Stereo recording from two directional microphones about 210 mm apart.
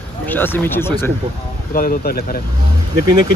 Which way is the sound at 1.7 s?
40° left (ahead or behind).